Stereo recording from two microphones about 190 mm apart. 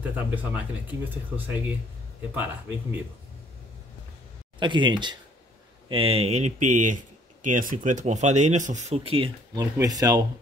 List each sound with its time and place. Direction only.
0.0 s speech: 10° right (ahead or behind)
4.6 s speech: 25° right (ahead or behind)